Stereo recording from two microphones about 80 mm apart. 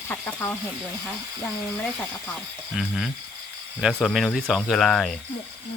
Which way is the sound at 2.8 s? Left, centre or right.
Centre.